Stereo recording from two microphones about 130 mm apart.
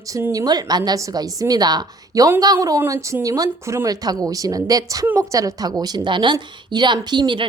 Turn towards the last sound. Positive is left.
turn(degrees=-35)  # may be behind; listen again after turning